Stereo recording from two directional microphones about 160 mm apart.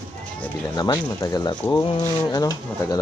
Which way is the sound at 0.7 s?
25° left (ahead or behind).